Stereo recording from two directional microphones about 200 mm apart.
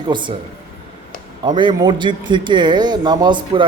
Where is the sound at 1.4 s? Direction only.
20° right (ahead or behind).